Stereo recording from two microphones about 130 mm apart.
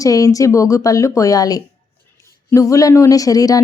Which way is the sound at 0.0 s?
25° left (ahead or behind).